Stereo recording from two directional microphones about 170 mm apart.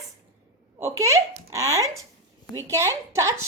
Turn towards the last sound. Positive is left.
turn(degrees=-15)  # may be behind; listen again after turning